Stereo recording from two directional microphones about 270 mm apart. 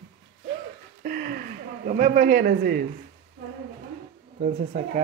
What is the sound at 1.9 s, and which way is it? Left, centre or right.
Speech, right.